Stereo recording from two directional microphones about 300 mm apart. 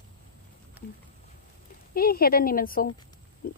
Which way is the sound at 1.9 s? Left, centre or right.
Left.